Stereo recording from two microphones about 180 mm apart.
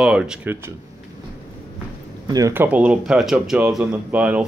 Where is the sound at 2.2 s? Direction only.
20° right (ahead or behind).